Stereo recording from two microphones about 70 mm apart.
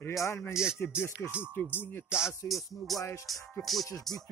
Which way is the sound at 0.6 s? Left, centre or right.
Centre.